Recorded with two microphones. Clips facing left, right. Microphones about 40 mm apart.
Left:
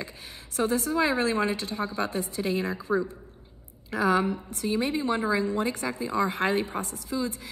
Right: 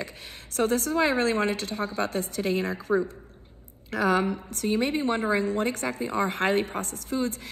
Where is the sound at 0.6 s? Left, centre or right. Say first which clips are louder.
Right 1 dB; right.